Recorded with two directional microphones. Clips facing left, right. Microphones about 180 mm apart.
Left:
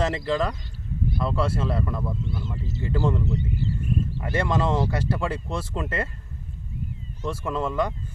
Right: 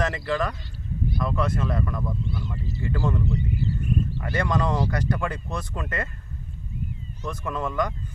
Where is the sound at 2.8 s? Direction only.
25° left (ahead or behind).